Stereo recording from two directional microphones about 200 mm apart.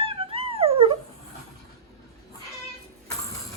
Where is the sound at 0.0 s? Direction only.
25° right (ahead or behind).